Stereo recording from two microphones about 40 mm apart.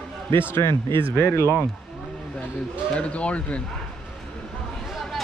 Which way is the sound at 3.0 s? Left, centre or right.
Left.